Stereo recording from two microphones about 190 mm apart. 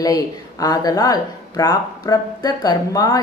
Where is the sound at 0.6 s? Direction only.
20° left (ahead or behind).